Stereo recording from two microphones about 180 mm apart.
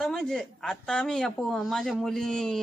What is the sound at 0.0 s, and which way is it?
A woman's voice, 5° left (ahead or behind).